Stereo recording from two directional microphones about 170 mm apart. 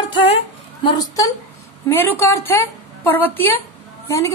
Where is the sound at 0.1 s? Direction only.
30° left (ahead or behind).